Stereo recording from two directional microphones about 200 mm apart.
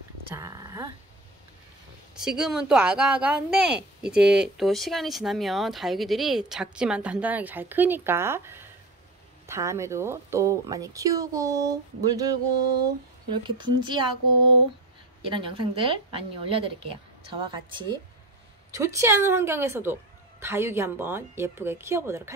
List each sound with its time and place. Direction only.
0.3 s speech: 15° right (ahead or behind)
2.1 s speech: 5° right (ahead or behind)
13.6 s a woman's voice: 25° right (ahead or behind)
15.2 s a woman's voice: 25° right (ahead or behind)